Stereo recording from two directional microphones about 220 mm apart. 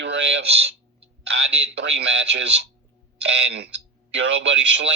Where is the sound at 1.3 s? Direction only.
55° right (ahead or behind).